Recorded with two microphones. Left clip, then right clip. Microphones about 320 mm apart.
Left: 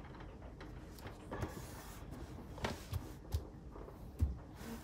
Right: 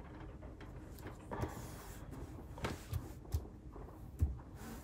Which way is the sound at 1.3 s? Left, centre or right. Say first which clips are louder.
Right 2 dB; centre.